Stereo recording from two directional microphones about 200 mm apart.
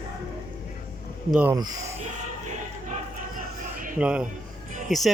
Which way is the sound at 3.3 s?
45° right (ahead or behind).